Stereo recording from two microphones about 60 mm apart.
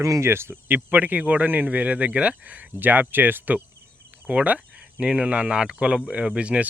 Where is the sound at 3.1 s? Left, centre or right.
Right.